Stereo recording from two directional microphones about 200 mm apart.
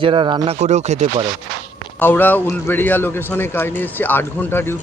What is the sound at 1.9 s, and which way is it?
Speech, 10° left (ahead or behind).